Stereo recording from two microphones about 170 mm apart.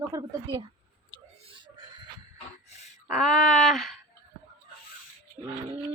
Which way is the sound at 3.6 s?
Centre (ahead or behind).